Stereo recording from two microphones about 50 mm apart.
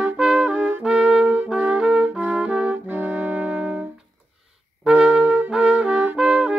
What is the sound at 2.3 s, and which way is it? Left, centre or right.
Music, centre.